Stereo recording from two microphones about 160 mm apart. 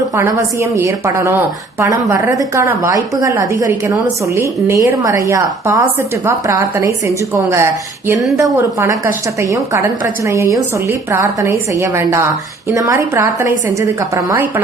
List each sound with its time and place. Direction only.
0.2 s a woman's voice: 20° right (ahead or behind)